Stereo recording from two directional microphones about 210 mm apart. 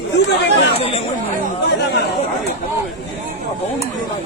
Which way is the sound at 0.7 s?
25° left (ahead or behind).